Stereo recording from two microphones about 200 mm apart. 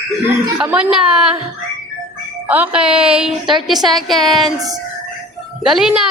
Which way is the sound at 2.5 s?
5° right (ahead or behind).